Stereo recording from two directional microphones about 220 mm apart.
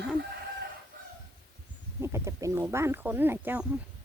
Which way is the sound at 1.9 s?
15° right (ahead or behind).